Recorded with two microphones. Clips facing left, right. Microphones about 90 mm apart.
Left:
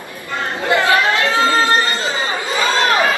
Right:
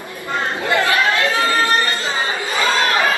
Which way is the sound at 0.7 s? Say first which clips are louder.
Left 3 dB; 20° left (ahead or behind).